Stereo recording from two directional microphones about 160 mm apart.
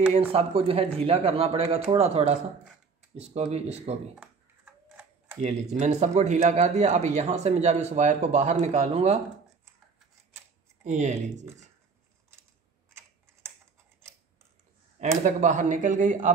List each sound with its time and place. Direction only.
0.3 s speech: 35° right (ahead or behind)
5.4 s speech: 45° right (ahead or behind)
10.8 s speech: 50° right (ahead or behind)
15.2 s speech: 50° right (ahead or behind)